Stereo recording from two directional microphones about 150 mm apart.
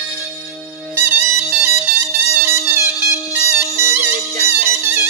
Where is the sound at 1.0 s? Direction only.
15° right (ahead or behind).